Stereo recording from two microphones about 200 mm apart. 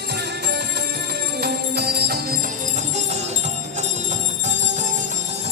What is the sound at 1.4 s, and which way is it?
Music, 50° right (ahead or behind).